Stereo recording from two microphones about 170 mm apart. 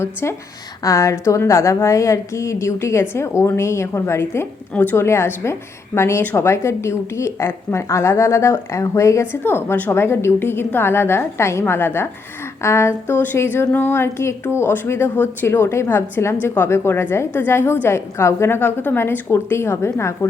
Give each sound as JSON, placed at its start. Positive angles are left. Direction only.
{"t": 0.0, "sound": "a woman's voice", "side_deg": 15}